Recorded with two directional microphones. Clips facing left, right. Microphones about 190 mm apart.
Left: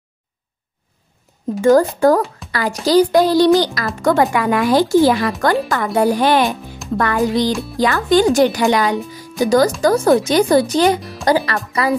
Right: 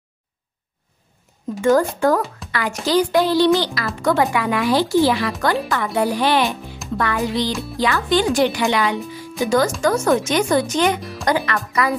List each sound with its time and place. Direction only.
1.6 s speech: 35° left (ahead or behind)